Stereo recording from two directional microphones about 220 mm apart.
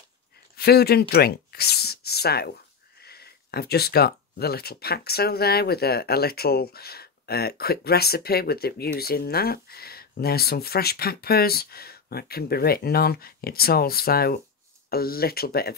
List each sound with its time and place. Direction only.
0.6 s speech: 45° left (ahead or behind)